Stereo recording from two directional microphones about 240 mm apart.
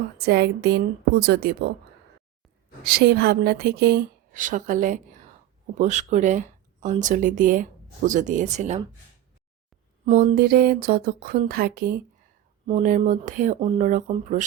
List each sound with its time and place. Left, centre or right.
0.2 s a woman's voice: right
2.8 s speech: right
10.1 s speech: right